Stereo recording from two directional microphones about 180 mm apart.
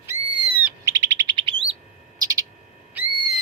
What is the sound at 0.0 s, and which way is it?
Owl, 10° right (ahead or behind).